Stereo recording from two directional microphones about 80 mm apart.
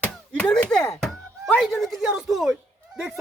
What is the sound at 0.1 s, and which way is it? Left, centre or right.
Chop, centre.